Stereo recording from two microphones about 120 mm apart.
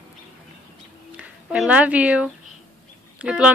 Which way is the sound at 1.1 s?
10° right (ahead or behind).